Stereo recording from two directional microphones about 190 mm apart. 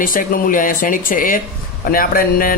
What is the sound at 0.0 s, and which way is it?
A man's voice, 45° left (ahead or behind).